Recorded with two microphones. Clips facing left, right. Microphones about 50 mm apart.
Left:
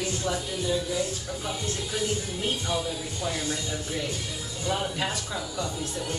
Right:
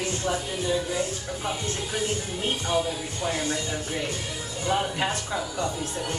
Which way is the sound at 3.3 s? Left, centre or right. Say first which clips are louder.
Right 3 dB; centre.